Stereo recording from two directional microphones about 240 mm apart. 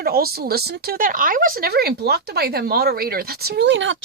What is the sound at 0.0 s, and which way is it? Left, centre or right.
Speech, right.